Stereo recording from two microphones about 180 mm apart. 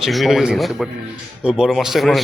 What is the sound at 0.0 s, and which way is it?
Speech, centre (ahead or behind).